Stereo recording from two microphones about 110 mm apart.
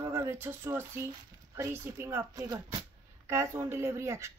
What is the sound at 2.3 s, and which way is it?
Speech, 35° right (ahead or behind).